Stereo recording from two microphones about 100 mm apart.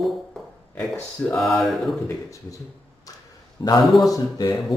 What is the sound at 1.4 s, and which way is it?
Mantra, centre (ahead or behind).